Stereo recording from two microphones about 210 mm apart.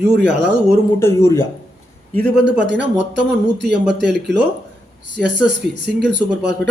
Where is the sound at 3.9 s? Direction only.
55° right (ahead or behind).